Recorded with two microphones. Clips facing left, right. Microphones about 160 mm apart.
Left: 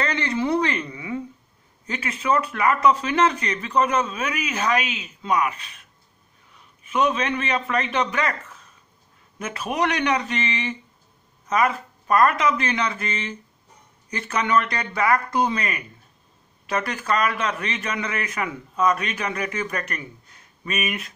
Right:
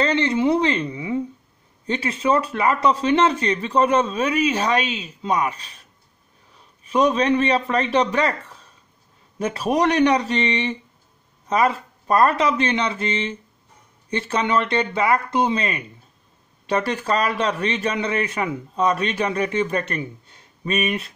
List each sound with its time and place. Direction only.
0.0 s a woman's voice: 25° right (ahead or behind)